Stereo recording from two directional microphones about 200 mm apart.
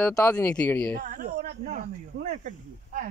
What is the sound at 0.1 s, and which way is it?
Speech, 10° left (ahead or behind).